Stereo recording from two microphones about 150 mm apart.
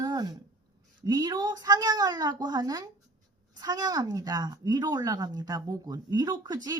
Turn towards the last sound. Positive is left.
turn(degrees=-25)  # may be behind; listen again after turning